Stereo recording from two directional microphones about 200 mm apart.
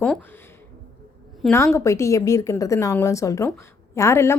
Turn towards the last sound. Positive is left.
turn(degrees=15)  # may be behind; listen again after turning